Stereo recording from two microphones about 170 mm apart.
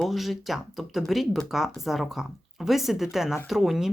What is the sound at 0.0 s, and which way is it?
Speech, centre (ahead or behind).